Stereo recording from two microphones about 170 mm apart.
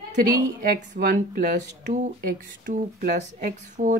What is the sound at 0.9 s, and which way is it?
Speech, 60° right (ahead or behind).